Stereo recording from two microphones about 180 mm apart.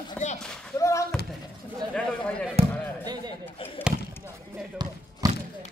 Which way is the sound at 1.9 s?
5° left (ahead or behind).